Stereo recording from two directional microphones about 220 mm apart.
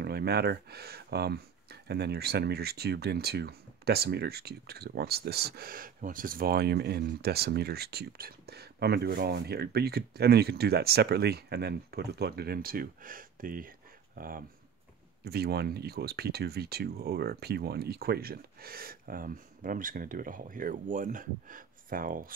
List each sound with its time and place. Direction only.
0.0 s speech: 45° right (ahead or behind)